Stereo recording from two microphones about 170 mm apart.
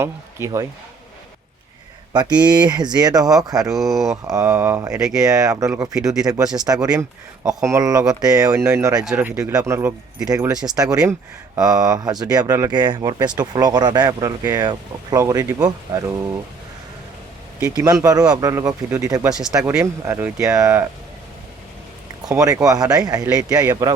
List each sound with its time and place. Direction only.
0.0 s speech: 15° right (ahead or behind)
2.5 s speech: 25° right (ahead or behind)
3.7 s speech: centre (ahead or behind)
4.1 s speech: 20° right (ahead or behind)
9.0 s speech: 5° right (ahead or behind)
9.3 s speech: 20° right (ahead or behind)
17.7 s speech: 20° right (ahead or behind)
22.3 s speech: 20° right (ahead or behind)